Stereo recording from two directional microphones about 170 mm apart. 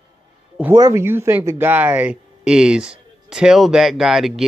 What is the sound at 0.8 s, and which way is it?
Speech, 20° right (ahead or behind).